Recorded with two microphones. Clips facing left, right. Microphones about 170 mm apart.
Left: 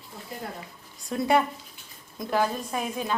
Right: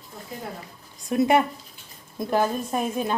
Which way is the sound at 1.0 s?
20° right (ahead or behind).